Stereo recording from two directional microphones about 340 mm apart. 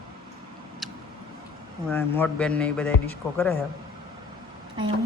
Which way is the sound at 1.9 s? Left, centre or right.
Centre.